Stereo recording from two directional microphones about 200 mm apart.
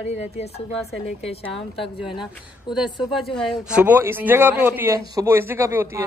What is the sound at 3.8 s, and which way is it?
A man's voice, 10° right (ahead or behind).